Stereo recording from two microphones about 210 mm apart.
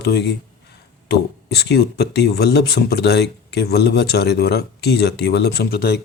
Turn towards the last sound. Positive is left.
turn(degrees=50)  # may be behind; listen again after turning